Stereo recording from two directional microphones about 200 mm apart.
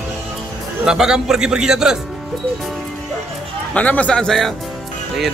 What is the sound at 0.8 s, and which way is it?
Speech, 5° right (ahead or behind).